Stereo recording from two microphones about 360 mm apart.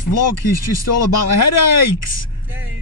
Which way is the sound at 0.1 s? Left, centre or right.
Left.